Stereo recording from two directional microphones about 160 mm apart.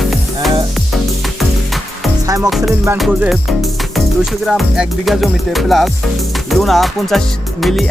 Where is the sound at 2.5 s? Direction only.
Centre (ahead or behind).